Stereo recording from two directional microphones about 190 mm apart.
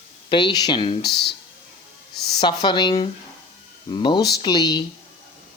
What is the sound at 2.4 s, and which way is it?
Speech, 25° left (ahead or behind).